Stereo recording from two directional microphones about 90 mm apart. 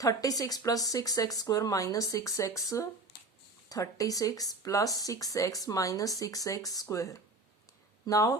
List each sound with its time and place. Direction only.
0.0 s speech: 40° left (ahead or behind)